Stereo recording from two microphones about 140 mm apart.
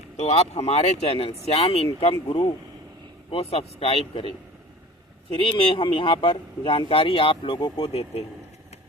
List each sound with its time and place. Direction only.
0.2 s speech: 50° left (ahead or behind)
5.3 s speech: 40° left (ahead or behind)